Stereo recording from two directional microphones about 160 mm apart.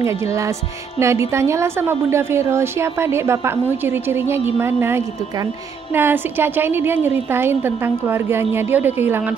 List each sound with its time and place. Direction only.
0.2 s a woman's voice: 20° right (ahead or behind)